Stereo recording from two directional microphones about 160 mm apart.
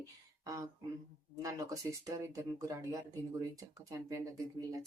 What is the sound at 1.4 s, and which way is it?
Speech, 20° right (ahead or behind).